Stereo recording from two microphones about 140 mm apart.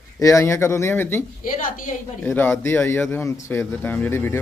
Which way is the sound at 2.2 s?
15° left (ahead or behind).